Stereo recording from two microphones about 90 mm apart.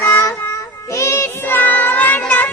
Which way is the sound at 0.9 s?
30° left (ahead or behind).